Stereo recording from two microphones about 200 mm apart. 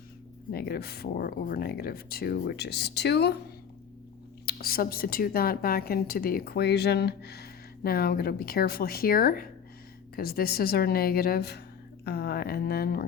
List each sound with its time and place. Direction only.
0.5 s a woman's voice: 50° left (ahead or behind)
4.4 s a woman's voice: 50° left (ahead or behind)